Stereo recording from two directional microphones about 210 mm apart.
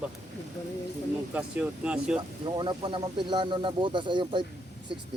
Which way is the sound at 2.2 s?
20° right (ahead or behind).